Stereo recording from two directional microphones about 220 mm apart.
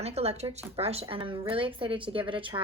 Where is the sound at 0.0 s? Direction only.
30° right (ahead or behind).